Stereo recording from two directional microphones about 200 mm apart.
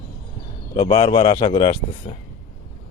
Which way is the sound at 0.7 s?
25° left (ahead or behind).